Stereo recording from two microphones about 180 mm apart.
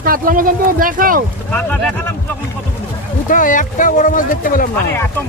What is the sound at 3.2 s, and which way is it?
Speech, 45° left (ahead or behind).